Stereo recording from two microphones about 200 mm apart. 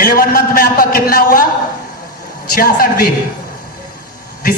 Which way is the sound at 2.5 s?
45° left (ahead or behind).